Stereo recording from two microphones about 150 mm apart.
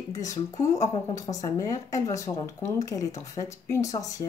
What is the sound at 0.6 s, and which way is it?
A woman's voice, 20° left (ahead or behind).